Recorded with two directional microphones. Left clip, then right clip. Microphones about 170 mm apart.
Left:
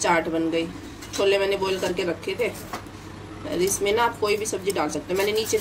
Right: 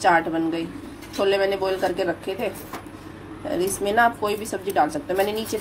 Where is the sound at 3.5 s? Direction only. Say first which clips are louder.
Right 1 dB; 35° right (ahead or behind).